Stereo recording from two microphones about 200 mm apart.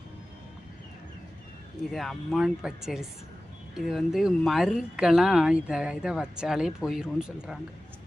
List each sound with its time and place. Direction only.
1.9 s speech: centre (ahead or behind)